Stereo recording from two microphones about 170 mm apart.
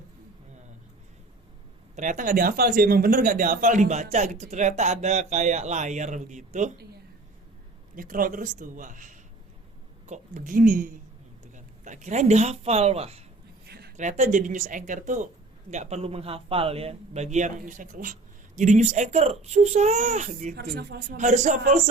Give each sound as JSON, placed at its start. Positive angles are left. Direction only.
{"t": 2.0, "sound": "speech", "side_deg": -50}
{"t": 7.9, "sound": "a woman's voice", "side_deg": -55}
{"t": 13.7, "sound": "a sound", "side_deg": -70}
{"t": 13.9, "sound": "speech", "side_deg": -45}
{"t": 20.6, "sound": "speech", "side_deg": -70}
{"t": 21.2, "sound": "speech", "side_deg": -45}